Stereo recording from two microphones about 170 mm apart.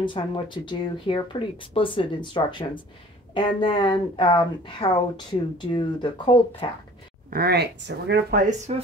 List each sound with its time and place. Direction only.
0.0 s speech: 30° left (ahead or behind)
7.2 s speech: 65° right (ahead or behind)
8.5 s speech: 40° right (ahead or behind)